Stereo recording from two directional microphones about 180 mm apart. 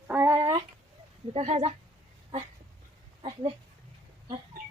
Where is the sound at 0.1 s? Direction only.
15° right (ahead or behind).